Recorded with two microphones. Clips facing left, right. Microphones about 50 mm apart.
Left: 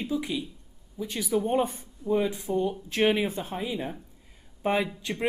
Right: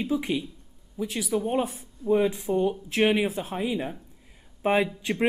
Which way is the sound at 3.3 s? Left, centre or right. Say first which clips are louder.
Right 3 dB; centre.